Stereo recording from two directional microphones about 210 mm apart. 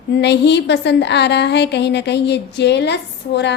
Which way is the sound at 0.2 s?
55° left (ahead or behind).